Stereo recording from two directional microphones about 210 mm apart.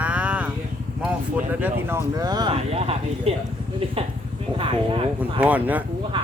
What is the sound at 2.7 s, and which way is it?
Speech, 30° right (ahead or behind).